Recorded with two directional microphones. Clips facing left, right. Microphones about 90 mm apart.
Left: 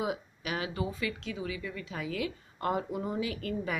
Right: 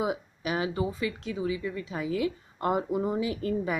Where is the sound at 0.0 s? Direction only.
30° right (ahead or behind).